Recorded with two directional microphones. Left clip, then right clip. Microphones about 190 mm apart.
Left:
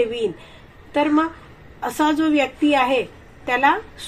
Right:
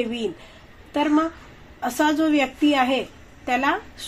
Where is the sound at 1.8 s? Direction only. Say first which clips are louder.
Left 1 dB; 25° right (ahead or behind).